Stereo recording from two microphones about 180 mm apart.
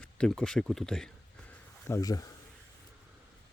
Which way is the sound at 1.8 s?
15° left (ahead or behind).